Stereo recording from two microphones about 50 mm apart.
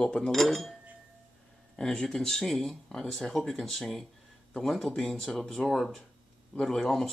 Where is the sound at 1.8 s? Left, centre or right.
Centre.